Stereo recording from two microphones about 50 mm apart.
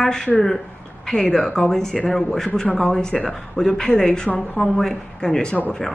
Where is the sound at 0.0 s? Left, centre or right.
Centre.